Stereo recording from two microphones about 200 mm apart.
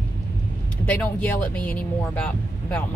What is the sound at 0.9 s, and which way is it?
Speech, 5° left (ahead or behind).